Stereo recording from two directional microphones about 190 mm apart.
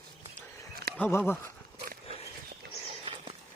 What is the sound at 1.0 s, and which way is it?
Speech, 10° left (ahead or behind).